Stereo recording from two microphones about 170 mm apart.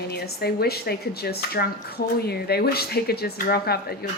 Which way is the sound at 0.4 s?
70° left (ahead or behind).